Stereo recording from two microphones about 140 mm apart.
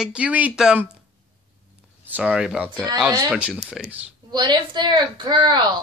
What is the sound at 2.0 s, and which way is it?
Speech, 10° right (ahead or behind).